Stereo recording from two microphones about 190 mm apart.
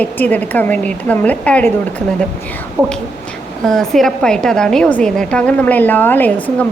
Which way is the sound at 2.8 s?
15° right (ahead or behind).